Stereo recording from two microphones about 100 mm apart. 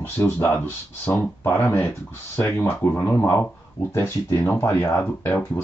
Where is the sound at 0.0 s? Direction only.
20° left (ahead or behind).